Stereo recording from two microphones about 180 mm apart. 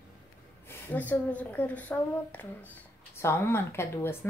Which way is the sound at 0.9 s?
10° left (ahead or behind).